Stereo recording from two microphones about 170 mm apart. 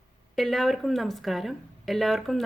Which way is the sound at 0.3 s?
Centre (ahead or behind).